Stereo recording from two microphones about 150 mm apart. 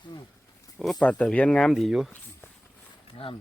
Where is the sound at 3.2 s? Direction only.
40° left (ahead or behind).